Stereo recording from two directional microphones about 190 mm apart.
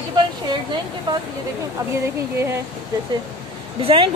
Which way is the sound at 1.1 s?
25° right (ahead or behind).